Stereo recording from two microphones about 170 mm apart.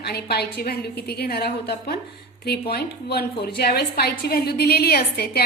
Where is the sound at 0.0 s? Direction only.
70° left (ahead or behind).